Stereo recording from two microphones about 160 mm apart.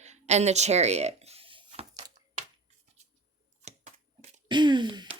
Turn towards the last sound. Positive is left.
turn(degrees=-30)  # may be behind; listen again after turning